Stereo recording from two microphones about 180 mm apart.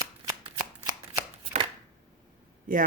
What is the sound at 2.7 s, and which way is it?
Speech, 50° right (ahead or behind).